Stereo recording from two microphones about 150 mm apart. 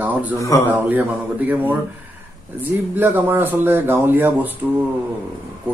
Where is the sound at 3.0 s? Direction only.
15° right (ahead or behind).